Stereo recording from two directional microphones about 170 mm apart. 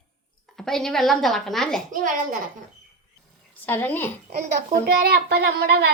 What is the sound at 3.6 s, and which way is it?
Speech, 10° left (ahead or behind).